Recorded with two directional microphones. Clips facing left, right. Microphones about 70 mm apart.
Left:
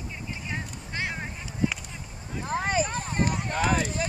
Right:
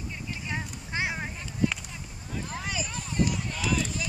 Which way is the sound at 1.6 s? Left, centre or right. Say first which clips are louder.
Even; left.